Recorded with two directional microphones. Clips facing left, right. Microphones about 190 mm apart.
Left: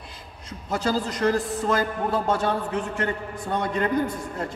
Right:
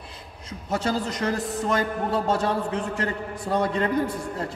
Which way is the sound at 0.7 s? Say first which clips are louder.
Left 1 dB; 25° right (ahead or behind).